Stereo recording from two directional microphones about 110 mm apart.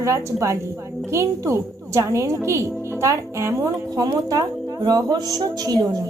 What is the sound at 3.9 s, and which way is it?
A woman's voice, 35° right (ahead or behind).